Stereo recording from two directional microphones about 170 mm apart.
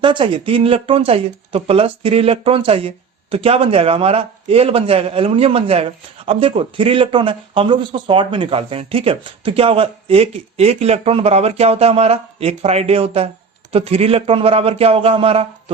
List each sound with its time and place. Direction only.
0.0 s a man's voice: 30° right (ahead or behind)